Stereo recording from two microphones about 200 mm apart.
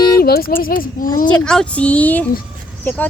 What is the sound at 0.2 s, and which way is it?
Speech, 50° left (ahead or behind).